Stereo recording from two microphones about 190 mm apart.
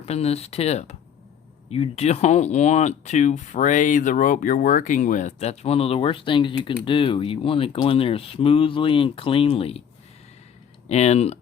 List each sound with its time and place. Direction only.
0.0 s speech: 35° left (ahead or behind)
10.8 s speech: 35° left (ahead or behind)